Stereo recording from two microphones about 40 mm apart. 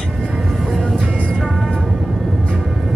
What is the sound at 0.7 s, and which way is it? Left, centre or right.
Music, centre.